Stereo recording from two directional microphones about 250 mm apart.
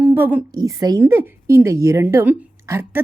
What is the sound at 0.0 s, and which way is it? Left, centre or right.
A woman's voice, centre.